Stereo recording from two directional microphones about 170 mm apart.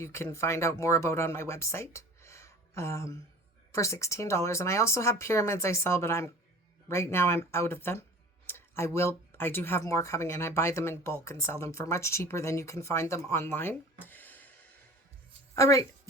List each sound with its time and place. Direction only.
0.0 s speech: 15° left (ahead or behind)
14.0 s a sound: 10° left (ahead or behind)
15.5 s speech: 20° left (ahead or behind)